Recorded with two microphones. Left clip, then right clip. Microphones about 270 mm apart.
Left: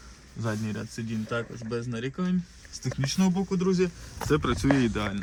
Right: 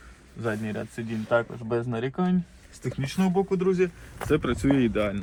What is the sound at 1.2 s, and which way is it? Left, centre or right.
Speech, centre.